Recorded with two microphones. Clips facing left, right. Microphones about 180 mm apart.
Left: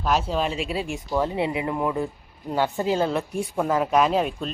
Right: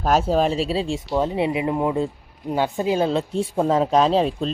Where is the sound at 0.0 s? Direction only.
45° right (ahead or behind).